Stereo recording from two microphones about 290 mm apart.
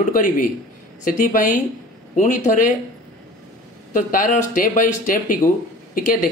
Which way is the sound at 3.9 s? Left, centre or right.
Left.